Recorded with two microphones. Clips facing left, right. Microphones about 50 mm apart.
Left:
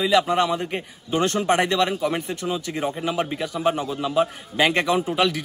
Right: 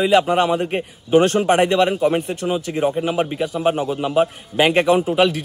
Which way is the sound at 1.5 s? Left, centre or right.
Centre.